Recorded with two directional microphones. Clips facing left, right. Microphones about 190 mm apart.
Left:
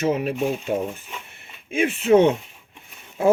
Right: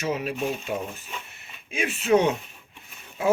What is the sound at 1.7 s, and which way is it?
Speech, 55° left (ahead or behind).